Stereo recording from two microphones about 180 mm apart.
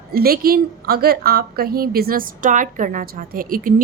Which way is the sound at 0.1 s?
55° right (ahead or behind).